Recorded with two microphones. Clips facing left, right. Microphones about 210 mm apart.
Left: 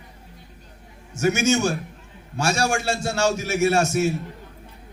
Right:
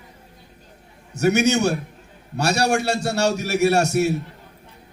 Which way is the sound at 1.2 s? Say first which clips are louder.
Right 2 dB; 65° right (ahead or behind).